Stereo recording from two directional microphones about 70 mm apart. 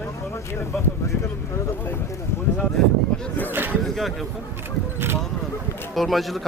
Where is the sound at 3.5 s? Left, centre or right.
Right.